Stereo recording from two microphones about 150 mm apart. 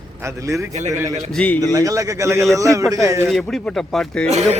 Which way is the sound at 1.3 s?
10° left (ahead or behind).